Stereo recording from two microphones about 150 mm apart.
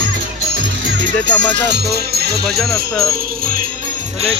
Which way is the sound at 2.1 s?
90° right.